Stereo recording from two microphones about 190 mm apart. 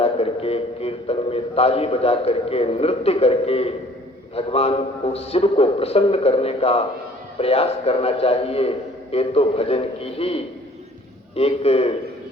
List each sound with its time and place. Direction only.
0.0 s a man's voice: 30° left (ahead or behind)